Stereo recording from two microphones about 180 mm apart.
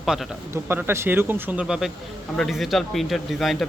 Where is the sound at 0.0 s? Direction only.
Centre (ahead or behind).